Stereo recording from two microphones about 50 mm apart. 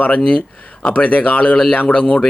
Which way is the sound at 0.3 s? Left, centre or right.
Centre.